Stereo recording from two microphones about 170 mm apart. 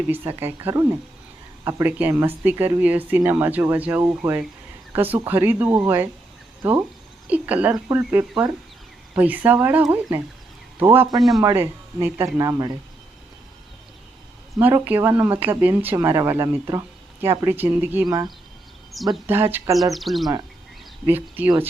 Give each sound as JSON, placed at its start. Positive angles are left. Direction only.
{"t": 0.1, "sound": "a man's voice", "side_deg": -15}
{"t": 14.6, "sound": "speech", "side_deg": -15}
{"t": 18.9, "sound": "speech", "side_deg": 0}
{"t": 19.3, "sound": "speech", "side_deg": -15}
{"t": 19.9, "sound": "speech", "side_deg": 0}
{"t": 21.1, "sound": "speech", "side_deg": -10}